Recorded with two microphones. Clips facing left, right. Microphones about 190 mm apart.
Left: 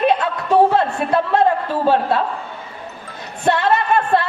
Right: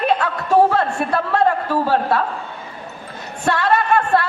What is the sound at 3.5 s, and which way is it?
Speech, 20° left (ahead or behind).